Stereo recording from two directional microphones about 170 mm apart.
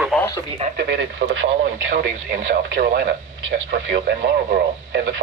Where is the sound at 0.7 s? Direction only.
90° right.